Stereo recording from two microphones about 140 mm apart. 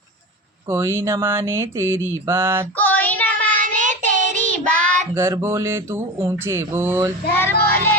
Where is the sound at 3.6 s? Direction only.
65° right (ahead or behind).